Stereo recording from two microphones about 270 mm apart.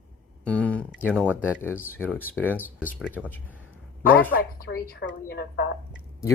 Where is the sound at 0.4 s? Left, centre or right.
Centre.